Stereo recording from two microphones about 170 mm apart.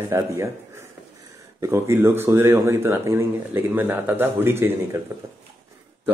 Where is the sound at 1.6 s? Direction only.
15° right (ahead or behind).